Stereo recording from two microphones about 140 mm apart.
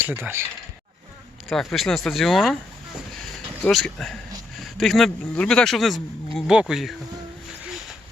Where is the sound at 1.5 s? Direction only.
Centre (ahead or behind).